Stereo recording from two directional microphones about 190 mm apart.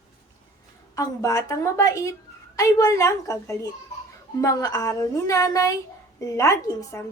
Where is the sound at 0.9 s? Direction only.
15° left (ahead or behind).